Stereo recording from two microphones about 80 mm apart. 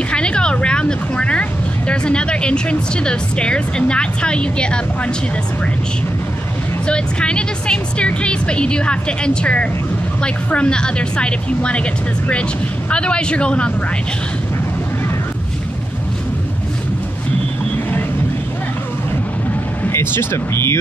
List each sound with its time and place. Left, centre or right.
0.1 s speech: centre
6.9 s speech: centre
19.8 s speech: left